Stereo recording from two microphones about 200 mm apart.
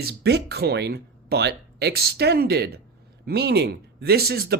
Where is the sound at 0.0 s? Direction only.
55° right (ahead or behind).